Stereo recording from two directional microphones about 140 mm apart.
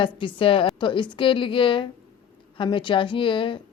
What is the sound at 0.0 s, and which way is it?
A woman's voice, 35° left (ahead or behind).